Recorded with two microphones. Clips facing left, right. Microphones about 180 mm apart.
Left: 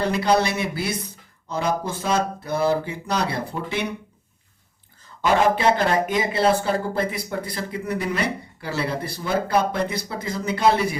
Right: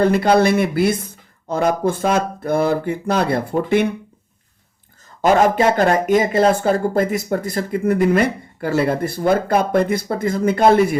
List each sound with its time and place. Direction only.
0.0 s speech: 50° right (ahead or behind)
5.2 s speech: 45° right (ahead or behind)